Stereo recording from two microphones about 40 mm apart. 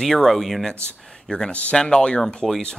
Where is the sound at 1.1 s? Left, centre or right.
Centre.